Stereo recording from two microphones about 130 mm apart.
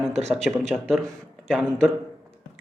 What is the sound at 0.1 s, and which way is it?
Speech, 60° right (ahead or behind).